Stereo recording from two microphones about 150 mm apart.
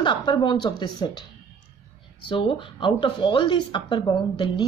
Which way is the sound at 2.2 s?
35° left (ahead or behind).